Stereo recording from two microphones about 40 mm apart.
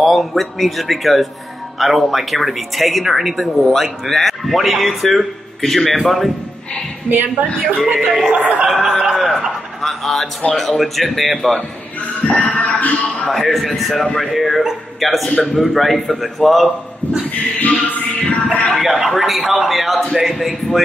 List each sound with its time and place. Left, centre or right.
0.0 s speech: centre
7.1 s a woman's voice: right
7.8 s music: centre
8.3 s speech: right
8.6 s music: centre
9.1 s a sound: centre
10.5 s speech: centre
12.3 s music: left
13.3 s a man's voice: centre
17.6 s music: left
18.2 s music: left
18.8 s speech: centre